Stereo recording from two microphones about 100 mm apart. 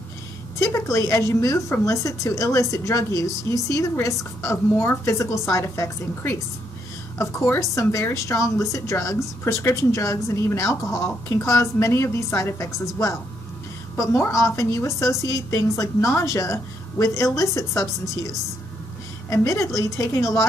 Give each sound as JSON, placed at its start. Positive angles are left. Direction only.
{"t": 0.6, "sound": "a woman's voice", "side_deg": 30}